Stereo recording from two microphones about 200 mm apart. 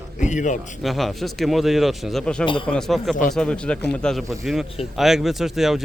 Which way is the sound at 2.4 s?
25° left (ahead or behind).